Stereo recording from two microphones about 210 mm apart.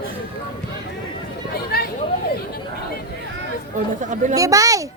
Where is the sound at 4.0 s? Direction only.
35° right (ahead or behind).